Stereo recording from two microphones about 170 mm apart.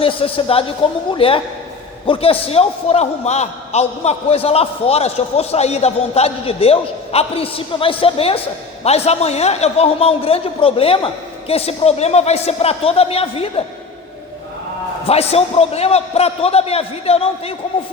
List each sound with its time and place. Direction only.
0.0 s a man's voice: 30° left (ahead or behind)
15.0 s a man's voice: 35° left (ahead or behind)